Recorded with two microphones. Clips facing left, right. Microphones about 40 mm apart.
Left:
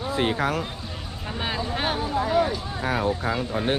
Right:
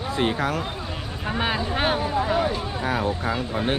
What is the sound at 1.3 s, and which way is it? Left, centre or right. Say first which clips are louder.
Speech: right 4 dB; centre.